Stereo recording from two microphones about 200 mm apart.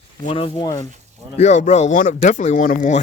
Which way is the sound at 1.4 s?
35° left (ahead or behind).